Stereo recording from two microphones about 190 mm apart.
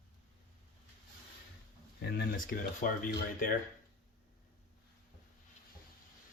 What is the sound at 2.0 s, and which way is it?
Speech, 50° left (ahead or behind).